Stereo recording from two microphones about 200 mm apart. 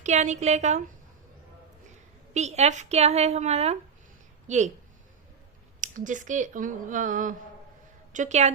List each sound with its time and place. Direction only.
0.0 s speech: 35° right (ahead or behind)
2.3 s speech: 35° right (ahead or behind)
5.8 s speech: 40° right (ahead or behind)